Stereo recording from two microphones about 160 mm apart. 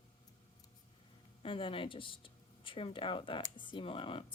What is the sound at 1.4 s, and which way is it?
Speech, 35° left (ahead or behind).